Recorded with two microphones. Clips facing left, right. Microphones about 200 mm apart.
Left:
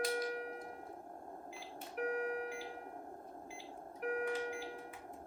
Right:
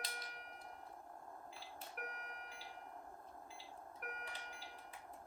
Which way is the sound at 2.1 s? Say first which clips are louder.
Left 16 dB; 50° left (ahead or behind).